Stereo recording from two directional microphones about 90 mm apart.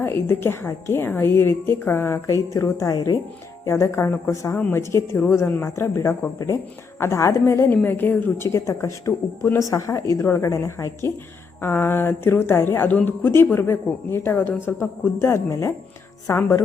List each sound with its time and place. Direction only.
0.0 s a woman's voice: 25° left (ahead or behind)
8.4 s a woman's voice: 30° left (ahead or behind)